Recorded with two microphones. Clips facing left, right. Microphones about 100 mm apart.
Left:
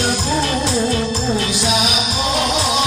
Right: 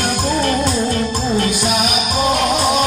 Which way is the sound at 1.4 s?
45° right (ahead or behind).